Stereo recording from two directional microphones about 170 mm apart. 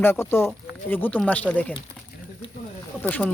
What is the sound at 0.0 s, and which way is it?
Speech, 15° left (ahead or behind).